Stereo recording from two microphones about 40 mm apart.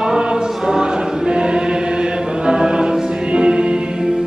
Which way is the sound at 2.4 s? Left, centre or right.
Centre.